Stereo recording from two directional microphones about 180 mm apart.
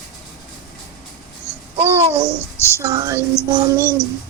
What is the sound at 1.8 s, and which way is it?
Babbling, 35° right (ahead or behind).